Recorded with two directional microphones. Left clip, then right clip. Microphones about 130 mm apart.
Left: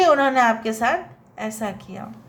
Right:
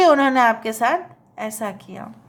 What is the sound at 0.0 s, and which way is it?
A woman's voice, 35° right (ahead or behind).